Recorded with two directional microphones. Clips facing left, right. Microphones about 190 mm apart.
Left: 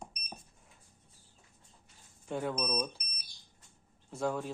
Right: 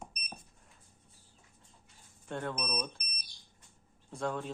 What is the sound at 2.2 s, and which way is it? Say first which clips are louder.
Speech: left 3 dB; 5° left (ahead or behind).